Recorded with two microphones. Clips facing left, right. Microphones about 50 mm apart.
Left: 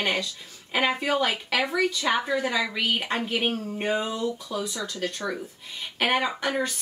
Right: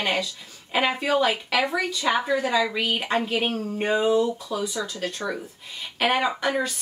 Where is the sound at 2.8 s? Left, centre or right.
Centre.